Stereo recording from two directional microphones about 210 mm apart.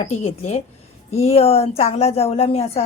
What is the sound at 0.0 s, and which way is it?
A woman's voice, 30° left (ahead or behind).